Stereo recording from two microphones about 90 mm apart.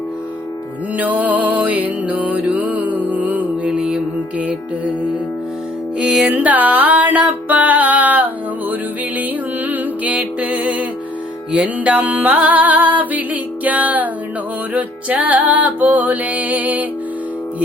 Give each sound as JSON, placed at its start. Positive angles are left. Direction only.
{"t": 0.9, "sound": "music", "side_deg": -20}
{"t": 6.0, "sound": "music", "side_deg": -10}
{"t": 9.6, "sound": "music", "side_deg": -15}